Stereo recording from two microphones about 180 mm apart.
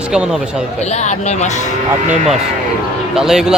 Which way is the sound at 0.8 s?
40° left (ahead or behind).